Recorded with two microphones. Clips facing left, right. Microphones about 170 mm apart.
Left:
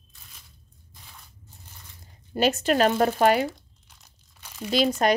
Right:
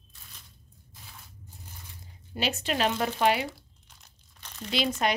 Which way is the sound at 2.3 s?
45° left (ahead or behind).